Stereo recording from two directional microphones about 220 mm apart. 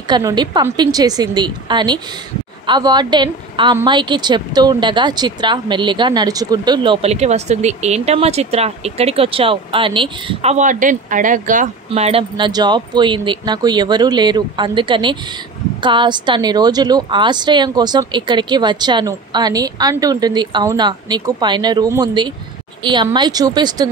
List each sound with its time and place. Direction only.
0.0 s a woman's voice: 20° right (ahead or behind)